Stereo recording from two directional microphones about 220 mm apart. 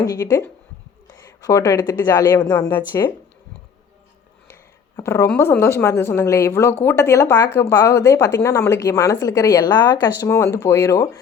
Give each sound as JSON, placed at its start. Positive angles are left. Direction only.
{"t": 0.0, "sound": "speech", "side_deg": 15}
{"t": 4.9, "sound": "speech", "side_deg": 15}